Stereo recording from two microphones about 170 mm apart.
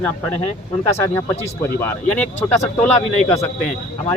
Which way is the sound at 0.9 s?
15° left (ahead or behind).